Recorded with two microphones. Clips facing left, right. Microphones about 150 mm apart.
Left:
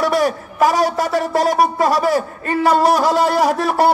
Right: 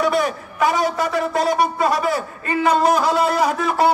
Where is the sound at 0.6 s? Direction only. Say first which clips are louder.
Left 3 dB; 40° left (ahead or behind).